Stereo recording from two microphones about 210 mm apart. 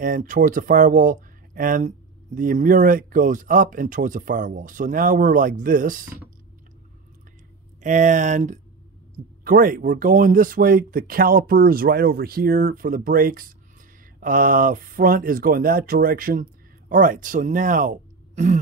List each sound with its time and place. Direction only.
0.0 s speech: 40° right (ahead or behind)
7.8 s speech: 35° right (ahead or behind)